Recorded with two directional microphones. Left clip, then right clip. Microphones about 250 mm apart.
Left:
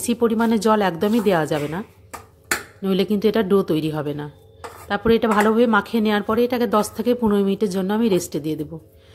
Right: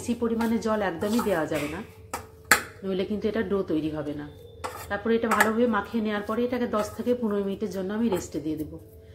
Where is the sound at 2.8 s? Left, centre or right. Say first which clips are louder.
Left 8 dB; left.